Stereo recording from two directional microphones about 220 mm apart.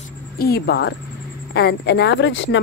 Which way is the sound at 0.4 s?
45° left (ahead or behind).